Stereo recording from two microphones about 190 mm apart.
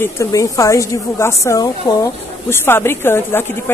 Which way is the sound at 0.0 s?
15° left (ahead or behind).